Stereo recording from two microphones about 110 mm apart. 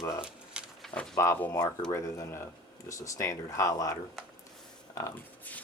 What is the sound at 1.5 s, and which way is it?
Speech, 35° left (ahead or behind).